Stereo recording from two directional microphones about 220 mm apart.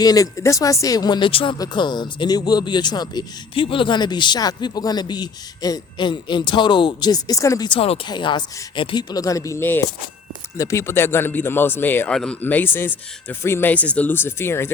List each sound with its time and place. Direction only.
0.0 s a man's voice: 15° left (ahead or behind)